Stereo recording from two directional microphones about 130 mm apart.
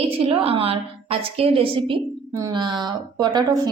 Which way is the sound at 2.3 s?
25° right (ahead or behind).